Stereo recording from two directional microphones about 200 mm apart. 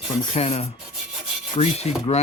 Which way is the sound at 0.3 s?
30° left (ahead or behind).